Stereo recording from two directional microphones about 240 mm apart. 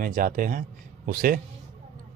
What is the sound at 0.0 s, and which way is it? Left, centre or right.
Speech, right.